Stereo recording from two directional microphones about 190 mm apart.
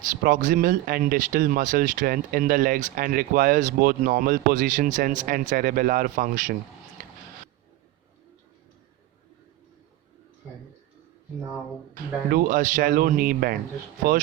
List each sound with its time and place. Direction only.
0.0 s speech: 45° right (ahead or behind)
12.3 s speech: 45° right (ahead or behind)